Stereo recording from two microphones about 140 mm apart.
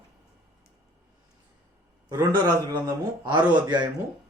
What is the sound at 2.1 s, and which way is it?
Speech, 20° right (ahead or behind).